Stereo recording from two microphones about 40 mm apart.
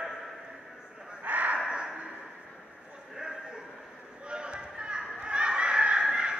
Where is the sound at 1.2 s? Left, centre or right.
Right.